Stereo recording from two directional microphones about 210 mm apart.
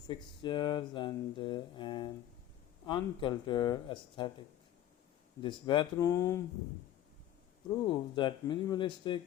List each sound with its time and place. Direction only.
0.1 s speech: 20° left (ahead or behind)
5.4 s speech: 25° left (ahead or behind)
7.9 s speech: 20° left (ahead or behind)